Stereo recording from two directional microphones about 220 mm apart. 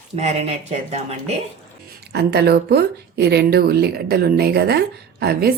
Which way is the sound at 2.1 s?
45° right (ahead or behind).